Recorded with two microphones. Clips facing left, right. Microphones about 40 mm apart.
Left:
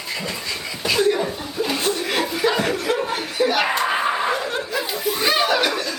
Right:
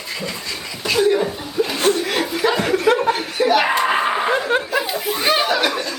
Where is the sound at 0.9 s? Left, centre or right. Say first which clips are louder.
Right 3 dB; centre.